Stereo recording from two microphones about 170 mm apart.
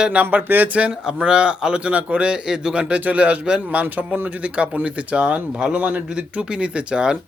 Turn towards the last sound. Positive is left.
turn(degrees=-5)  # may be behind; listen again after turning